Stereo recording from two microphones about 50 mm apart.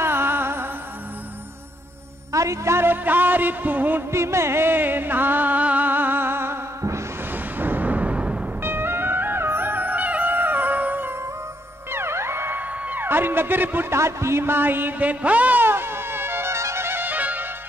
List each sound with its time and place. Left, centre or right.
0.0 s music: right
2.3 s a man's voice: right
2.8 s music: right
4.1 s music: right
7.5 s a sound: right
8.6 s music: right
11.9 s music: right
12.5 s a sound: right
13.9 s a sound: right
15.6 s music: right
16.5 s music: right
17.0 s music: right